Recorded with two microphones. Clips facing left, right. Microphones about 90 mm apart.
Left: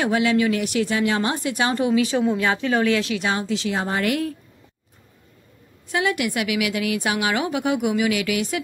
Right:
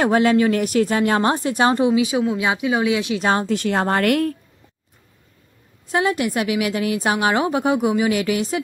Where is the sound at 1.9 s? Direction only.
15° right (ahead or behind).